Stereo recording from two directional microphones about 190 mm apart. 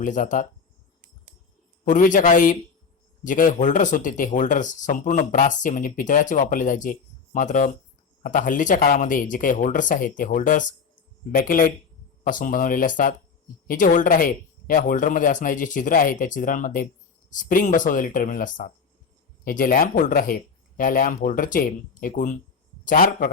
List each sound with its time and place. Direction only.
0.0 s speech: 45° left (ahead or behind)
1.8 s speech: 45° left (ahead or behind)